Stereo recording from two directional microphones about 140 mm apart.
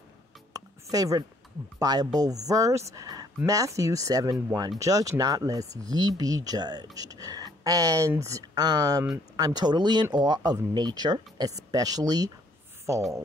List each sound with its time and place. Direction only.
0.9 s speech: 25° right (ahead or behind)